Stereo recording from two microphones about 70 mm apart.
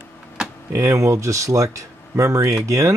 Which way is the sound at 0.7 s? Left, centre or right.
Right.